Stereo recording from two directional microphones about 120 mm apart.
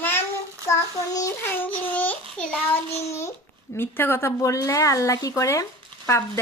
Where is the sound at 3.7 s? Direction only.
20° left (ahead or behind).